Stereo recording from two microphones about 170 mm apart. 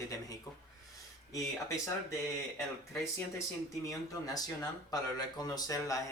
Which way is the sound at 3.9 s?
20° left (ahead or behind).